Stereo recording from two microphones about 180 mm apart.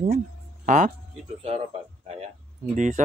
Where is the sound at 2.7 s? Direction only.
45° right (ahead or behind).